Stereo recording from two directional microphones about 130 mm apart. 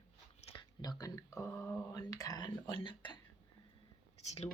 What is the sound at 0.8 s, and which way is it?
Speech, 30° left (ahead or behind).